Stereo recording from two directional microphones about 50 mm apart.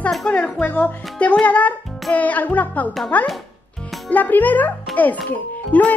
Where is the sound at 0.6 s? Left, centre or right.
Left.